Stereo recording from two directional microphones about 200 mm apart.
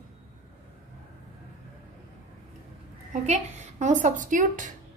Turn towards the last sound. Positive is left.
turn(degrees=-40)  # may be behind; listen again after turning